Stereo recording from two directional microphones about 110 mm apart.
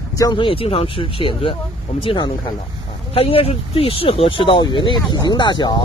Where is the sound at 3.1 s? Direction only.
60° left (ahead or behind).